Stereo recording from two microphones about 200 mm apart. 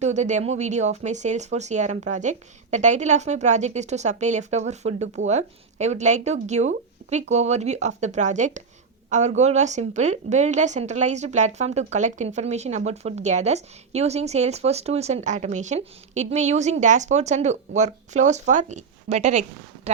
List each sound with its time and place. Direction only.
0.0 s a woman's voice: 35° right (ahead or behind)